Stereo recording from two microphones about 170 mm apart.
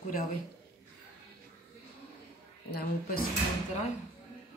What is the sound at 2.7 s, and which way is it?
Speech, 60° left (ahead or behind).